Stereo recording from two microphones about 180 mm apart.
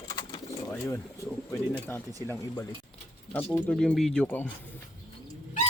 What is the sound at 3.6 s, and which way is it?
Speech, 5° left (ahead or behind).